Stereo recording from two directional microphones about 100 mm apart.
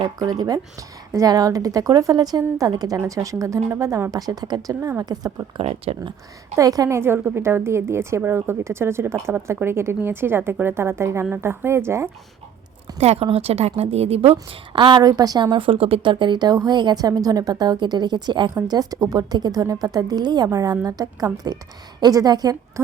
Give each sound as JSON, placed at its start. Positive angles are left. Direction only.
{"t": 0.2, "sound": "a woman's voice", "side_deg": -40}
{"t": 5.5, "sound": "speech", "side_deg": -80}
{"t": 6.6, "sound": "a woman's voice", "side_deg": -35}
{"t": 13.0, "sound": "a woman's voice", "side_deg": -90}
{"t": 14.8, "sound": "a woman's voice", "side_deg": -50}